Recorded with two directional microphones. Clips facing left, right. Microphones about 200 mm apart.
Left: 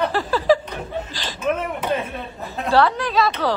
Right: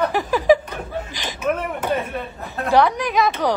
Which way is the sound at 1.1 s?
20° right (ahead or behind).